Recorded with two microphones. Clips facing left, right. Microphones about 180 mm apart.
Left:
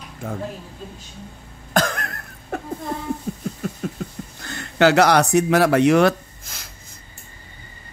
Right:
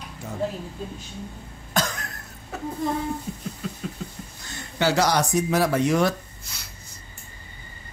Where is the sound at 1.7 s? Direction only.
55° left (ahead or behind).